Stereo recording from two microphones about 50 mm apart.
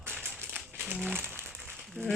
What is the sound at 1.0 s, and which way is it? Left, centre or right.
Speech, right.